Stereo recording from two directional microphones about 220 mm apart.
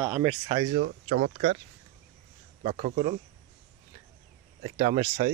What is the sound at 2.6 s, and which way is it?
Speech, 30° right (ahead or behind).